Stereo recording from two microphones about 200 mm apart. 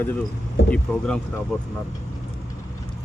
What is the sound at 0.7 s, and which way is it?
Speech, 5° left (ahead or behind).